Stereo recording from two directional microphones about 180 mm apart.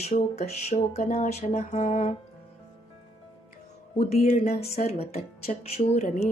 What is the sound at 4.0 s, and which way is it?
A woman's voice, 35° left (ahead or behind).